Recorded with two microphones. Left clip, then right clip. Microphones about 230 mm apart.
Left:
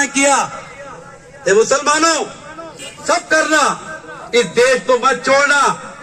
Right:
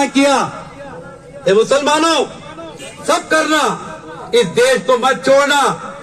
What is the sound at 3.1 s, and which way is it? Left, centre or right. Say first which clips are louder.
A man's voice: even; right.